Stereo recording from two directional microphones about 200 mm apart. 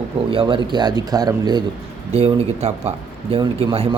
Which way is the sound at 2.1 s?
30° right (ahead or behind).